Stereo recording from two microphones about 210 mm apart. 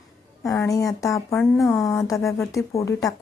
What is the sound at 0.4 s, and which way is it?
Speech, 15° left (ahead or behind).